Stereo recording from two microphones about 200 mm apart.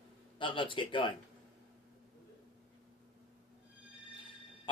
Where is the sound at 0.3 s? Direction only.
25° left (ahead or behind).